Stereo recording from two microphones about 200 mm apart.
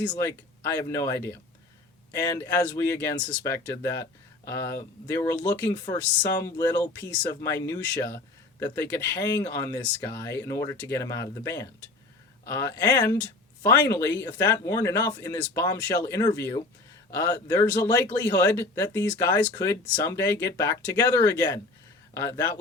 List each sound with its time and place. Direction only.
0.1 s speech: 15° left (ahead or behind)